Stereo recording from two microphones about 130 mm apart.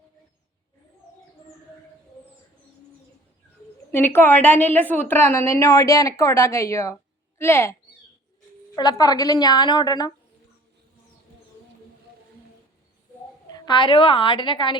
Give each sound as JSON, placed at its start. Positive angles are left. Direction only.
{"t": 3.9, "sound": "a woman's voice", "side_deg": 15}
{"t": 8.7, "sound": "a woman's voice", "side_deg": 30}
{"t": 13.5, "sound": "a woman's voice", "side_deg": 35}